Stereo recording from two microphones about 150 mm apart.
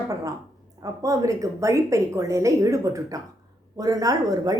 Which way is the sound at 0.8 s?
20° right (ahead or behind).